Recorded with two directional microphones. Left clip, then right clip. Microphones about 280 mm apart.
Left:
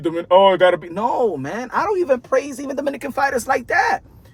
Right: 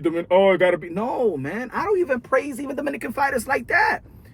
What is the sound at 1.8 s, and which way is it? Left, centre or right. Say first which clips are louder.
Speech: left 2 dB; centre.